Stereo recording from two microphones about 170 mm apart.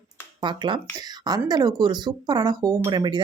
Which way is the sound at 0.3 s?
25° right (ahead or behind).